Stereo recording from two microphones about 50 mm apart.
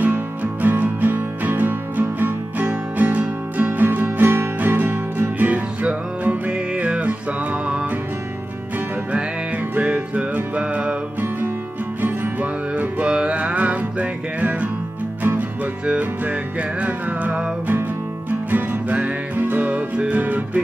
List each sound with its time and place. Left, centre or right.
0.0 s music: right
9.8 s music: right
12.0 s music: right
18.5 s music: right